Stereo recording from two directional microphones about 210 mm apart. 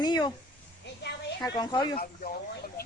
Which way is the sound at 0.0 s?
20° left (ahead or behind).